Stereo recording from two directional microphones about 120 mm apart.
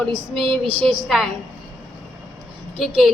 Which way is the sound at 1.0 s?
Centre (ahead or behind).